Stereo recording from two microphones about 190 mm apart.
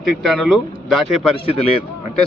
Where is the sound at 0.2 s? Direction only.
Centre (ahead or behind).